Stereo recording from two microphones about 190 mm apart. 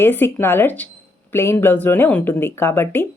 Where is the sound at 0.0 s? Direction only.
10° left (ahead or behind).